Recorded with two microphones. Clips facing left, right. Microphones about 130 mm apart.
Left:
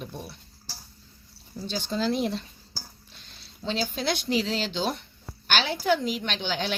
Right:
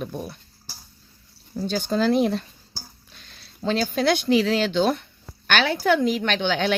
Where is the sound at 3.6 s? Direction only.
55° right (ahead or behind).